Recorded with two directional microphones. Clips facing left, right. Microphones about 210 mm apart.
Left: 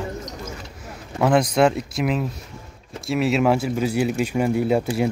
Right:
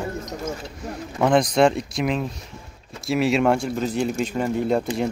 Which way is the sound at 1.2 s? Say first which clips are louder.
Even; 5° left (ahead or behind).